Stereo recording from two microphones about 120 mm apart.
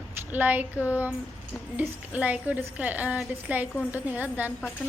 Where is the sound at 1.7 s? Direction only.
15° right (ahead or behind).